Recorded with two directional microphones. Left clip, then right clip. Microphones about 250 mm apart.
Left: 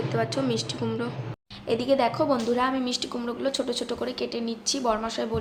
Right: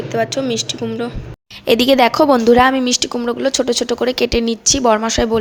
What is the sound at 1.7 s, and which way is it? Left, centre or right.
A woman's voice, right.